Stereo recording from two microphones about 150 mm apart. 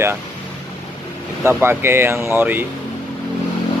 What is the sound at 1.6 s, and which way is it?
Speech, 15° right (ahead or behind).